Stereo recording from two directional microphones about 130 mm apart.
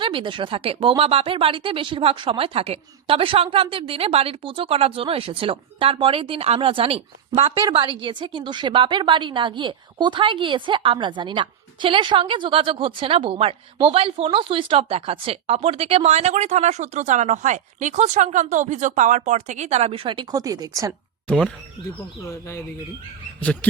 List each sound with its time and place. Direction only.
0.0 s a woman's voice: 40° right (ahead or behind)
22.2 s speech: 20° left (ahead or behind)